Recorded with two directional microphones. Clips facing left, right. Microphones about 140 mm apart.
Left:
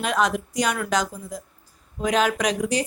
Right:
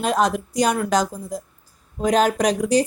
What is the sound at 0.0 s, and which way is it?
Speech, 35° right (ahead or behind).